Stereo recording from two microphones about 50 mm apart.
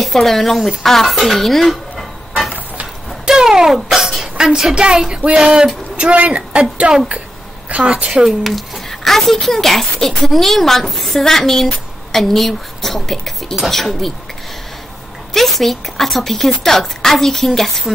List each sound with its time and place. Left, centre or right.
0.0 s speech: centre
0.8 s dishes: centre
3.3 s a sound: centre
6.3 s speech: centre
7.7 s a woman's voice: right; by 14.1 s centre
15.3 s a woman's voice: centre